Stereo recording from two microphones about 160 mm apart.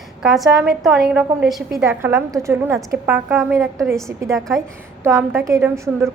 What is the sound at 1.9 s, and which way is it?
A woman's voice, 15° right (ahead or behind).